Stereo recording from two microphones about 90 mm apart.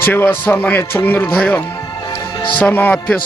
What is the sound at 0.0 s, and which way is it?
Speech, 25° left (ahead or behind).